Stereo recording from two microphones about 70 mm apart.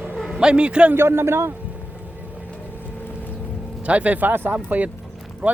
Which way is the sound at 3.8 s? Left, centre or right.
Centre.